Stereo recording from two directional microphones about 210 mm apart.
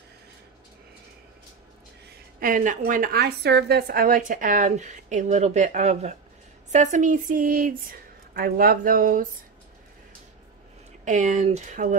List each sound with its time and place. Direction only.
2.0 s a woman's voice: 40° right (ahead or behind)
11.1 s a woman's voice: 35° right (ahead or behind)